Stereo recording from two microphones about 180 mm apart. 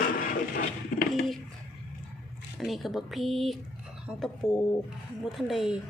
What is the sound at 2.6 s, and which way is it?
Speech, centre (ahead or behind).